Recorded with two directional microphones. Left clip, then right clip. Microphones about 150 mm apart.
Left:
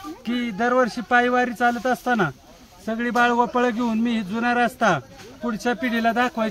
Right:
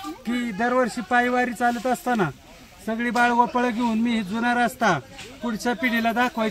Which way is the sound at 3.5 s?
10° left (ahead or behind).